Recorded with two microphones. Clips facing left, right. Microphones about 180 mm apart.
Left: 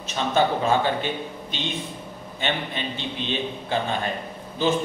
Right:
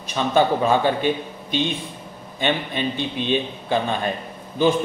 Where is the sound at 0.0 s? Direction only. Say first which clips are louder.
Right 3 dB; 15° right (ahead or behind).